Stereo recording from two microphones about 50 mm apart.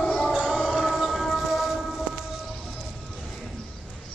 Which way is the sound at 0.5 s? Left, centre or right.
Centre.